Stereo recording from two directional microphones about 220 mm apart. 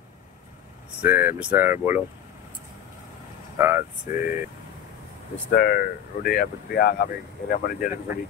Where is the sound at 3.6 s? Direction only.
10° right (ahead or behind).